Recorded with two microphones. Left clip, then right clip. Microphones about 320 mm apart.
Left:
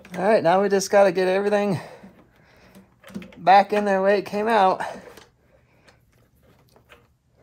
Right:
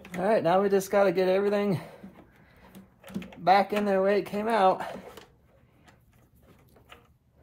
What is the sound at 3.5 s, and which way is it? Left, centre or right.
Speech, left.